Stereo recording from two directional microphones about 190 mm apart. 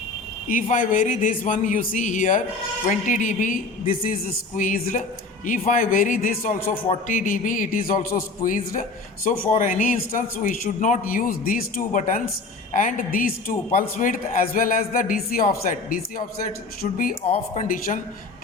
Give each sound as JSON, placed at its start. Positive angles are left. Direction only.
{"t": 0.5, "sound": "a man's voice", "side_deg": 45}
{"t": 16.8, "sound": "a man's voice", "side_deg": 50}